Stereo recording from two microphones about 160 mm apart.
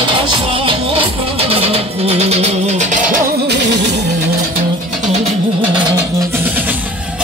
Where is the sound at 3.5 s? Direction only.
90° right.